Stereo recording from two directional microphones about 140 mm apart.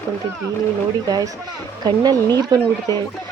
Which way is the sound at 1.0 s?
25° right (ahead or behind).